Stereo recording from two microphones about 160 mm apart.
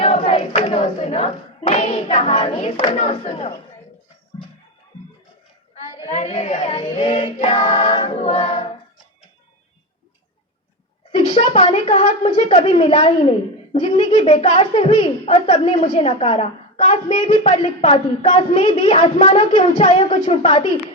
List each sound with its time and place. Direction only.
0.0 s hands: 35° left (ahead or behind)
6.1 s choir: 45° left (ahead or behind)
11.1 s a woman's voice: 35° left (ahead or behind)